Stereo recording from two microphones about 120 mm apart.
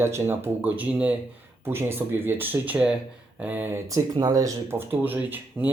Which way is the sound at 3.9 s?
30° right (ahead or behind).